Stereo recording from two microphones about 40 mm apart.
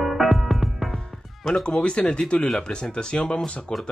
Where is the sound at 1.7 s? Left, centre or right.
Left.